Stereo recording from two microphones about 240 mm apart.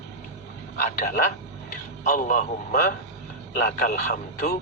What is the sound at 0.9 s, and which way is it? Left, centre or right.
A man's voice, left.